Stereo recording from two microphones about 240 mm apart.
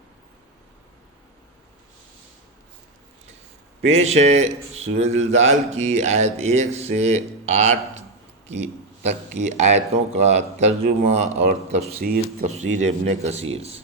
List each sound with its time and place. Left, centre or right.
3.8 s speech: right
9.0 s speech: right
11.9 s speech: right